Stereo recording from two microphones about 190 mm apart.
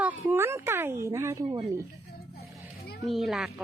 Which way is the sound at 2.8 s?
55° left (ahead or behind).